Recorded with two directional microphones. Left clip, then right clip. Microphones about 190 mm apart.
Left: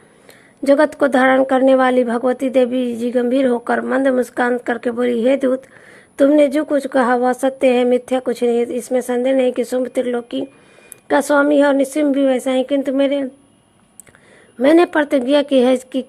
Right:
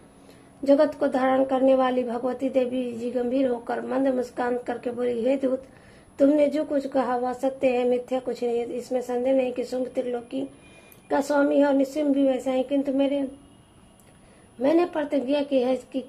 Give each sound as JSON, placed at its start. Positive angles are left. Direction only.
{"t": 0.6, "sound": "a woman's voice", "side_deg": 35}
{"t": 14.6, "sound": "a woman's voice", "side_deg": 35}